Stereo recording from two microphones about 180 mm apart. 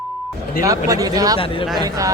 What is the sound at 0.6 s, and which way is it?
Speech, 20° right (ahead or behind).